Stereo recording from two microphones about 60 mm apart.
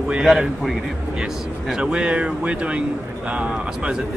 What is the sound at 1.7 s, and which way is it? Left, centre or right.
Speech, centre.